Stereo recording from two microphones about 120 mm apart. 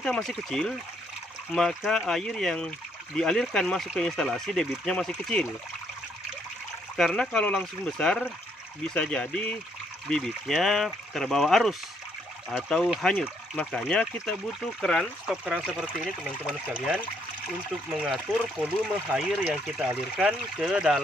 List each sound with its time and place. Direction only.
0.0 s speech: 5° left (ahead or behind)
7.0 s speech: 5° left (ahead or behind)